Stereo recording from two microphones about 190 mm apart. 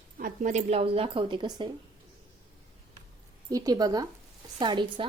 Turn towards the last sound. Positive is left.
turn(degrees=-25)  # may be behind; listen again after turning